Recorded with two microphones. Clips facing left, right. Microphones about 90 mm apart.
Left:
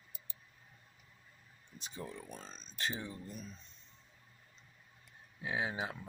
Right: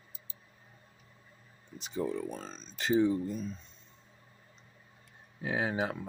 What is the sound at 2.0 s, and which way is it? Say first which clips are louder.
Speech: right 12 dB; 90° right.